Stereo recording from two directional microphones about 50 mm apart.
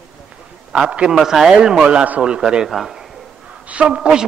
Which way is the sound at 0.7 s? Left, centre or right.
Right.